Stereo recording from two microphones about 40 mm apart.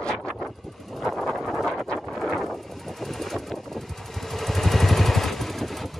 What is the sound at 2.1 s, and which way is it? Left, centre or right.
Vehicle, centre.